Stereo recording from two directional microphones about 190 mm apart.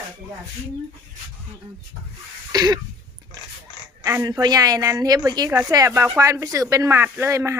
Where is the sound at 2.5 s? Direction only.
20° right (ahead or behind).